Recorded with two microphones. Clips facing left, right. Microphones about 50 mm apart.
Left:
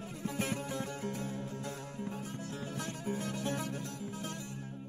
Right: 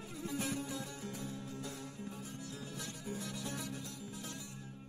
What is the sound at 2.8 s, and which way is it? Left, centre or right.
Music, left.